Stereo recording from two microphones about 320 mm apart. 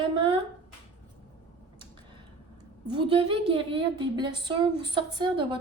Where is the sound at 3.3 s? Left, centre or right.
Centre.